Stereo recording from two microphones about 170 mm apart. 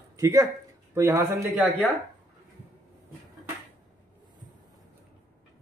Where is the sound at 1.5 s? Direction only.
5° right (ahead or behind).